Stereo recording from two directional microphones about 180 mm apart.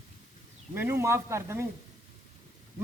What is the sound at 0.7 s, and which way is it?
Speech, 15° right (ahead or behind).